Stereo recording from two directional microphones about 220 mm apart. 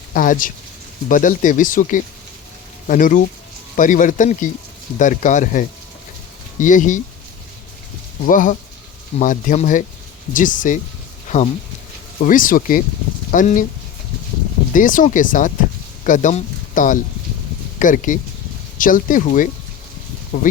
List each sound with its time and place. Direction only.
0.1 s speech: 40° left (ahead or behind)
8.2 s speech: 35° left (ahead or behind)
12.2 s speech: 40° left (ahead or behind)
14.7 s speech: 35° left (ahead or behind)